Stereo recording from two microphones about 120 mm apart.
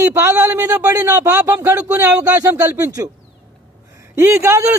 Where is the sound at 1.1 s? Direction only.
20° right (ahead or behind).